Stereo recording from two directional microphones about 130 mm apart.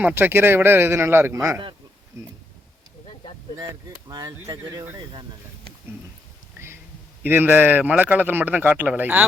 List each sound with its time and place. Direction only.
0.0 s a man's voice: 15° right (ahead or behind)
4.1 s speech: 25° right (ahead or behind)
7.3 s a man's voice: 15° right (ahead or behind)